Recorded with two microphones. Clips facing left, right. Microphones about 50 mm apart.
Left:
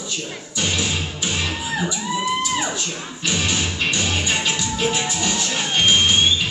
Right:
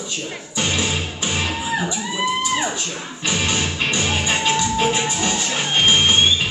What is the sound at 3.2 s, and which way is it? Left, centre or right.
Music, right.